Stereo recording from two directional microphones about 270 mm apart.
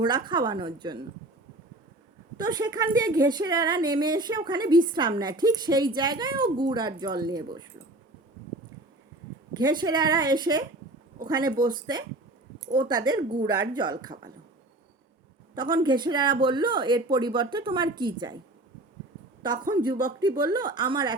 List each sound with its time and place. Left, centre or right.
0.0 s a woman's voice: centre
2.4 s a woman's voice: centre
9.6 s a woman's voice: centre
15.5 s a woman's voice: centre
19.4 s a woman's voice: centre